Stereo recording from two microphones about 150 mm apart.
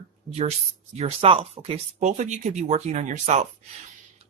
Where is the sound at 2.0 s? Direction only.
50° right (ahead or behind).